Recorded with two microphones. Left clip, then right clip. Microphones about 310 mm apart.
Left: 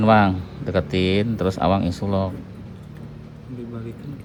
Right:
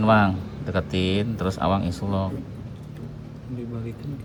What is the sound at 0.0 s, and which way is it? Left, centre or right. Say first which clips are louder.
Speech: left 3 dB; centre.